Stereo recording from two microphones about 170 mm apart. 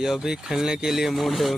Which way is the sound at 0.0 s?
Centre (ahead or behind).